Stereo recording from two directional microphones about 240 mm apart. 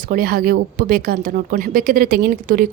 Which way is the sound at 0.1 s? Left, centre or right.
Right.